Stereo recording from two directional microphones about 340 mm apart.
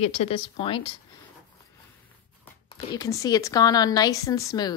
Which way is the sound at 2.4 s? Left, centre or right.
Centre.